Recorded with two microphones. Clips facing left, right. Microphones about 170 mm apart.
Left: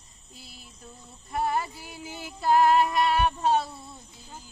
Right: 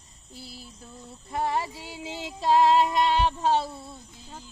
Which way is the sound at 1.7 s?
90° right.